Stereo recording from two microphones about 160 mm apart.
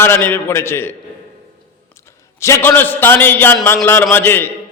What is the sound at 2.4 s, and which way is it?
A man's voice, 15° left (ahead or behind).